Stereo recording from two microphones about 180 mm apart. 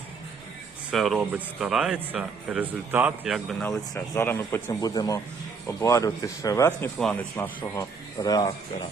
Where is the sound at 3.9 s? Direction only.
15° left (ahead or behind).